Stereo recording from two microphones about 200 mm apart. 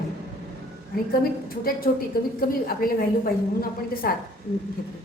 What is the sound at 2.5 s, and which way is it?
Speech, 45° left (ahead or behind).